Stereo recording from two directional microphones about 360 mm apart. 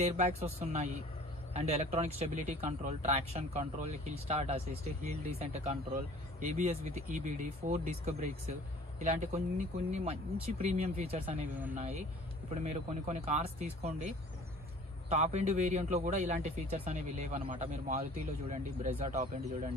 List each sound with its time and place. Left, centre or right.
0.0 s speech: centre